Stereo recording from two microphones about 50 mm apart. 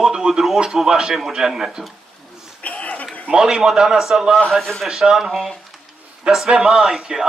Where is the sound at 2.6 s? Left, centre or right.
Left.